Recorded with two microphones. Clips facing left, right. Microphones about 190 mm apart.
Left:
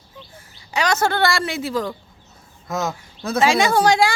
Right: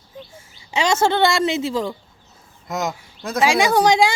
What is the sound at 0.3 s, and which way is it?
Speech, 25° right (ahead or behind).